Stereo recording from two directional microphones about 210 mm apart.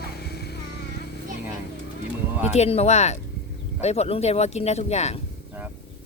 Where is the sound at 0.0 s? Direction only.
50° left (ahead or behind).